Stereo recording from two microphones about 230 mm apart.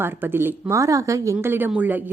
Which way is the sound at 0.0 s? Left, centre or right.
Centre.